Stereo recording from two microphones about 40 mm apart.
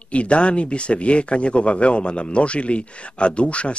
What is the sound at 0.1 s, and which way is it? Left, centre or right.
Speech, left.